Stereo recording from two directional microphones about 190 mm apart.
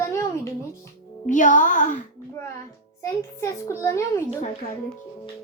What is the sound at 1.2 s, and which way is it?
Speech, 40° left (ahead or behind).